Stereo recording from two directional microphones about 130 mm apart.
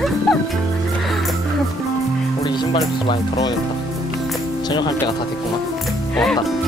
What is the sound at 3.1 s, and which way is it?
Speech, 35° left (ahead or behind).